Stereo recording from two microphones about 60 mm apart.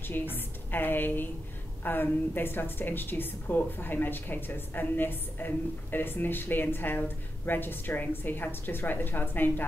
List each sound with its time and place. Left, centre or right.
0.0 s a woman's voice: left